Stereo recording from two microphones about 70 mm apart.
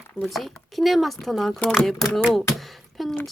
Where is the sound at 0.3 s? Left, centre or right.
Centre.